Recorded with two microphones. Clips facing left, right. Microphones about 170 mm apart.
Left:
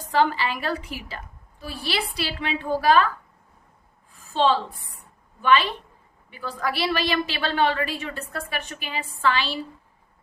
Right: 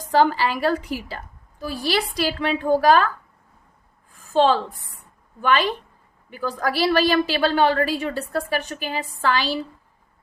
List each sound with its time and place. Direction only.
0.1 s a woman's voice: 40° right (ahead or behind)
4.3 s a woman's voice: 45° right (ahead or behind)